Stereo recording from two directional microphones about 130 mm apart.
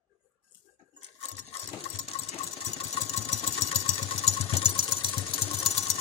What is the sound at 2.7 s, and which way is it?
Engine, 45° left (ahead or behind).